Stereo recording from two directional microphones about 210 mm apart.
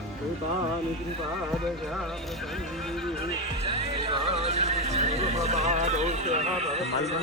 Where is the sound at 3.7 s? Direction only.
25° right (ahead or behind).